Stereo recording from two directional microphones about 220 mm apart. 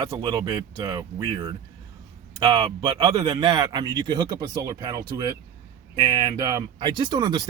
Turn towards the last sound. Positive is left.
turn(degrees=-20)  # may be behind; listen again after turning